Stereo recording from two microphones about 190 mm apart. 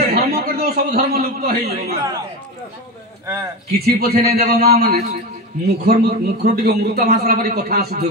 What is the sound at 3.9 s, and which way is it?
A man's voice, 55° right (ahead or behind).